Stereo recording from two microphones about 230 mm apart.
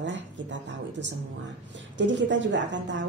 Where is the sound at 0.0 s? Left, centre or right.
Right.